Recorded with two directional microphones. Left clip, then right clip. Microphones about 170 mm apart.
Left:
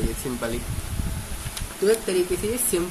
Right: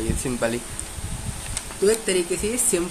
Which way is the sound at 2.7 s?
40° right (ahead or behind).